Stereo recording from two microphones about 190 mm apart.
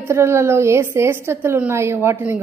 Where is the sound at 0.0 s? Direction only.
15° right (ahead or behind).